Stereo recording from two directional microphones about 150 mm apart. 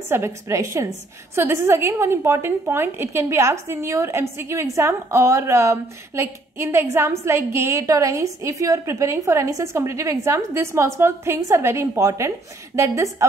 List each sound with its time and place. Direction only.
0.1 s a woman's voice: 20° right (ahead or behind)